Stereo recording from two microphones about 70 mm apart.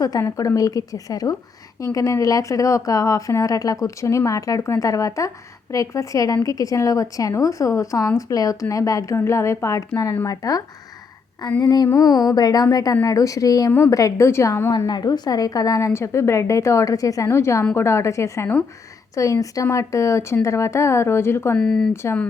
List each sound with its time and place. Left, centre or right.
0.0 s speech: left
1.8 s speech: left
9.1 s speech: left
11.6 s a sound: left
11.9 s speech: left
14.3 s a woman's voice: left
14.8 s a woman's voice: left
21.6 s speech: centre